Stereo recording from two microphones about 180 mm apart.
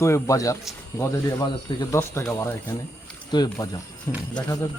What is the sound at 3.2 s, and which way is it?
Speech, 25° left (ahead or behind).